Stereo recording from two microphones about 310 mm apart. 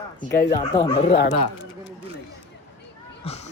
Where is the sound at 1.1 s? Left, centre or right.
Left.